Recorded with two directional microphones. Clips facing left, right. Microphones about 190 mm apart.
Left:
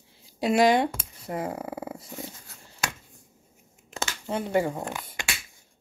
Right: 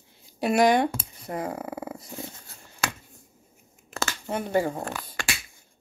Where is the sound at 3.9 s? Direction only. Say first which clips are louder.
Right 1 dB; 25° left (ahead or behind).